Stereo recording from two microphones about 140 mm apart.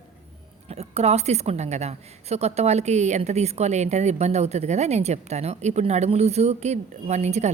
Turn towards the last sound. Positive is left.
turn(degrees=-55)  # may be behind; listen again after turning